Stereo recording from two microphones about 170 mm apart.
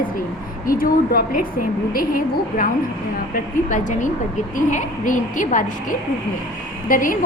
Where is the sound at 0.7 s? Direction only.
60° left (ahead or behind).